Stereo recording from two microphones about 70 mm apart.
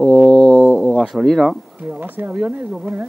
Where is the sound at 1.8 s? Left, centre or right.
Right.